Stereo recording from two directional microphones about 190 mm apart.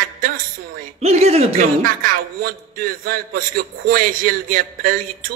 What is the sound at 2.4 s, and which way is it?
A man's voice, 50° right (ahead or behind).